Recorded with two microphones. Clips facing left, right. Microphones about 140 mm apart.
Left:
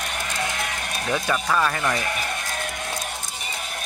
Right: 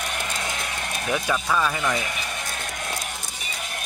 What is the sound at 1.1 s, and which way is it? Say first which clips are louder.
Speech: left 1 dB; 5° right (ahead or behind).